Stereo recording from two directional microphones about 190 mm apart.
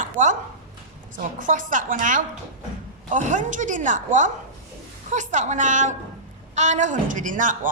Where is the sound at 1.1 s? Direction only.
45° right (ahead or behind).